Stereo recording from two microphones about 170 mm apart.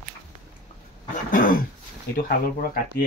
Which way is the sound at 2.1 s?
60° left (ahead or behind).